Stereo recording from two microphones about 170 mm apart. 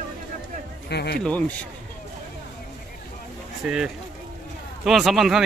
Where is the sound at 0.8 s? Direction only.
75° left (ahead or behind).